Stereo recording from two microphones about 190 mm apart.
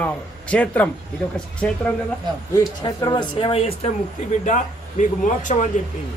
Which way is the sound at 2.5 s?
20° left (ahead or behind).